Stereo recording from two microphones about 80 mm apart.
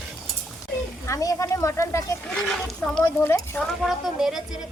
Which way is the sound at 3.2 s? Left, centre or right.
Left.